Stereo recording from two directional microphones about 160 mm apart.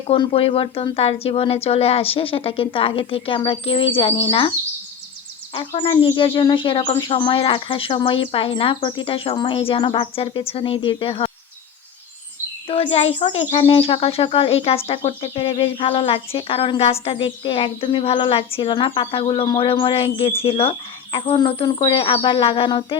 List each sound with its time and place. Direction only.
0.1 s speech: 35° left (ahead or behind)
5.5 s speech: 30° left (ahead or behind)
12.6 s speech: 35° left (ahead or behind)